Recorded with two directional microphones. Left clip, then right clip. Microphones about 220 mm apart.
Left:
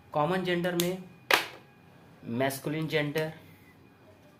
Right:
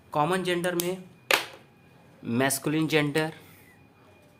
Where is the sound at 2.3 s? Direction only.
40° right (ahead or behind).